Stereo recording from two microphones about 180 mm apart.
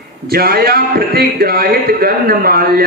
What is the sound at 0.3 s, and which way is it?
A man's voice, 60° right (ahead or behind).